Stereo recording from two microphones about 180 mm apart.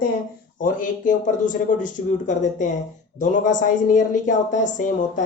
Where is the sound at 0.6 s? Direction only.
45° left (ahead or behind).